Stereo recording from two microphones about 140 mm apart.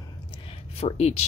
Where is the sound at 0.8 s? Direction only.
50° left (ahead or behind).